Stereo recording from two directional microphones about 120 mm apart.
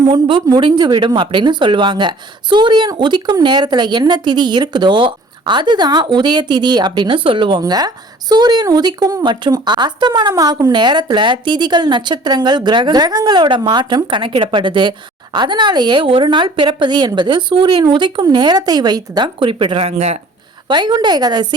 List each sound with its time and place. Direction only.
0.1 s a woman's voice: 40° right (ahead or behind); by 20.2 s 65° right (ahead or behind)
20.7 s a woman's voice: 40° right (ahead or behind)